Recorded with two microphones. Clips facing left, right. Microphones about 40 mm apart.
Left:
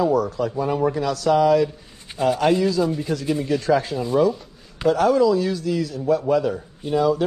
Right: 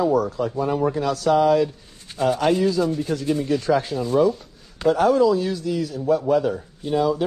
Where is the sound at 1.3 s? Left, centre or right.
Left.